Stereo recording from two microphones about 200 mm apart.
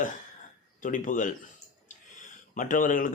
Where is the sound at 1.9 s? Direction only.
40° left (ahead or behind).